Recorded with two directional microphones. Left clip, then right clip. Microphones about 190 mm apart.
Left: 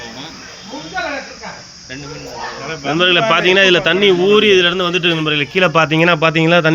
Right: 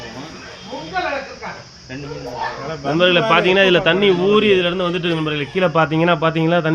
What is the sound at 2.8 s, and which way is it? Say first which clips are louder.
Speech: left 2 dB; 5° right (ahead or behind).